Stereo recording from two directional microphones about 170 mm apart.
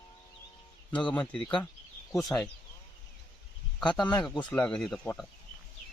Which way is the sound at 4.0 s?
25° left (ahead or behind).